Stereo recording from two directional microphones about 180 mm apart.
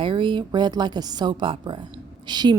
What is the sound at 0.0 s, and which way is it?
A woman's voice, 25° right (ahead or behind).